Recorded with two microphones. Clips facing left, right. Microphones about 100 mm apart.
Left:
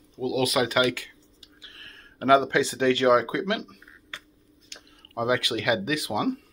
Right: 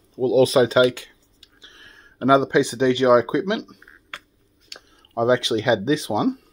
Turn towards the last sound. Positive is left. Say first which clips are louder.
# right 6 dB
turn(degrees=-25)  # may be behind; listen again after turning